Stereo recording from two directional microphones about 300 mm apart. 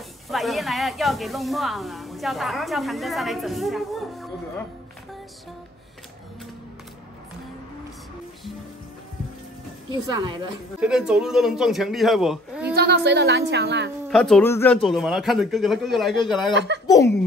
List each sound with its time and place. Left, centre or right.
0.3 s speech: centre
9.8 s a woman's voice: centre
10.8 s speech: centre
12.7 s a woman's voice: right
14.0 s speech: centre
16.5 s a woman's voice: right
16.8 s speech: centre